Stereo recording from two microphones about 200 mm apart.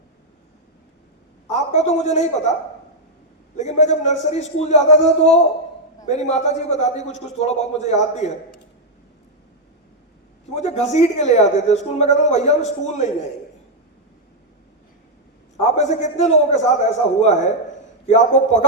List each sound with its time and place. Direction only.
1.5 s a man's voice: 35° left (ahead or behind)
3.6 s speech: 35° left (ahead or behind)
10.5 s speech: 35° left (ahead or behind)
15.6 s speech: 35° left (ahead or behind)